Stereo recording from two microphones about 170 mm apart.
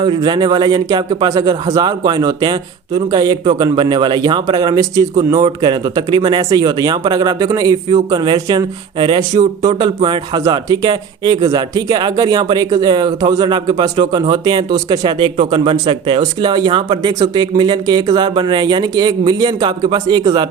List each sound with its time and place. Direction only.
0.0 s speech: 25° right (ahead or behind)